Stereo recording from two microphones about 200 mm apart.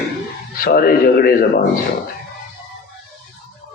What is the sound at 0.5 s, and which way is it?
Speech, 45° left (ahead or behind).